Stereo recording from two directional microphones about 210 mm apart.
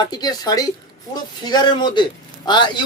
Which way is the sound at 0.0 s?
20° left (ahead or behind).